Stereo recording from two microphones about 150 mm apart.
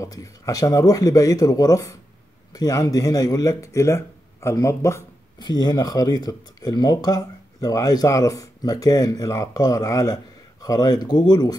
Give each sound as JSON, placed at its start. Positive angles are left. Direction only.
{"t": 0.0, "sound": "speech", "side_deg": 20}